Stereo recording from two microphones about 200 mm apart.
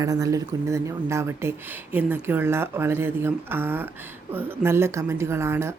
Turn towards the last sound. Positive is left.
turn(degrees=-15)  # may be behind; listen again after turning